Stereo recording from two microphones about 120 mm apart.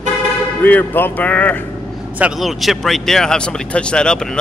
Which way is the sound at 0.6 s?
15° left (ahead or behind).